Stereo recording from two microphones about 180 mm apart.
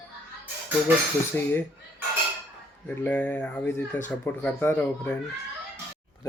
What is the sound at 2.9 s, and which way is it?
Speech, 10° left (ahead or behind).